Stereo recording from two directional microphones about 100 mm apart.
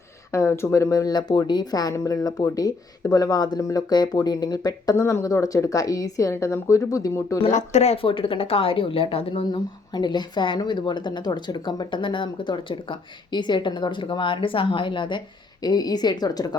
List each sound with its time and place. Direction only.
0.3 s speech: 25° left (ahead or behind)
7.4 s speech: 90° left; by 15.2 s 55° left (ahead or behind)
15.6 s a woman's voice: 40° left (ahead or behind)